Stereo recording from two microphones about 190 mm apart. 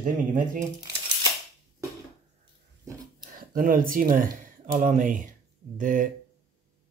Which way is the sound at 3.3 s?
50° right (ahead or behind).